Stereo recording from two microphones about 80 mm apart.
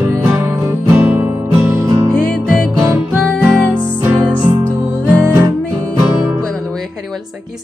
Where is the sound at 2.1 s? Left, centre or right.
Centre.